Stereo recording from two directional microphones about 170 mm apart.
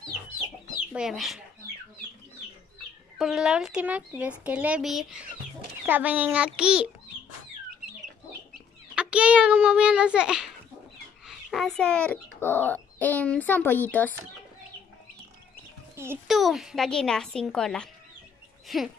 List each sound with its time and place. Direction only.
0.9 s speech: centre (ahead or behind)
3.2 s a child's voice: centre (ahead or behind)
8.9 s a child's voice: 5° right (ahead or behind); by 14.1 s 10° left (ahead or behind)
16.3 s speech: centre (ahead or behind)